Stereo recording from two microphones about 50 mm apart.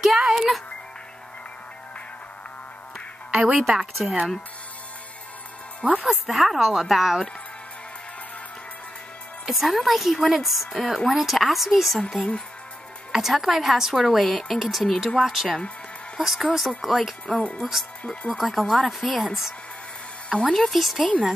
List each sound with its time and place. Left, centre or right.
0.0 s music: centre
3.3 s a woman's voice: right
6.0 s a woman's voice: centre
9.5 s a woman's voice: centre
12.2 s speech: centre
13.1 s a woman's voice: centre
17.4 s speech: left
18.4 s a woman's voice: centre
20.2 s speech: centre
20.5 s a woman's voice: centre